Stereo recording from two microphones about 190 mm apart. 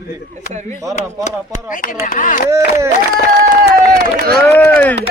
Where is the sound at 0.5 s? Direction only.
35° right (ahead or behind).